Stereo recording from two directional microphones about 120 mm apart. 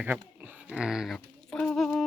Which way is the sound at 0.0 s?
10° right (ahead or behind).